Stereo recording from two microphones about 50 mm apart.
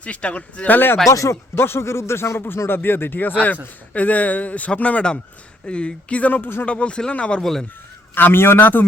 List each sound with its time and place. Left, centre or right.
0.0 s a man's voice: left
1.0 s speech: left
1.5 s a man's voice: left
6.7 s a man's voice: left
8.1 s a man's voice: left